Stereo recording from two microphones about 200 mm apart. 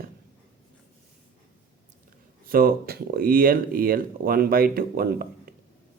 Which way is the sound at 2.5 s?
45° right (ahead or behind).